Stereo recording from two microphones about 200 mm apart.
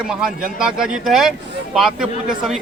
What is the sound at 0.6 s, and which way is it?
Speech, 5° right (ahead or behind).